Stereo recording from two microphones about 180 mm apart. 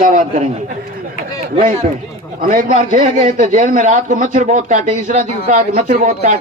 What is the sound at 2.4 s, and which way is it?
Speech, 50° right (ahead or behind).